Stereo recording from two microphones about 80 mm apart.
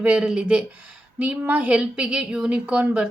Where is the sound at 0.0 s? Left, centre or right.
Centre.